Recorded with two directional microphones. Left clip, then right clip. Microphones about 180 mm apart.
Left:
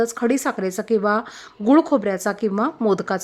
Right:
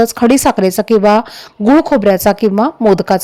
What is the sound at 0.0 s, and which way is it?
A woman's voice, 35° right (ahead or behind).